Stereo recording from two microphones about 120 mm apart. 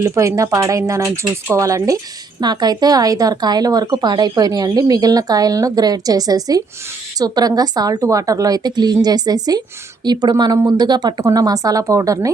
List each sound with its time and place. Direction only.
0.0 s speech: 25° right (ahead or behind)